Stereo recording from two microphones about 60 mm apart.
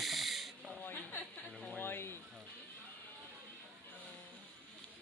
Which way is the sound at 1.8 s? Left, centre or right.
Left.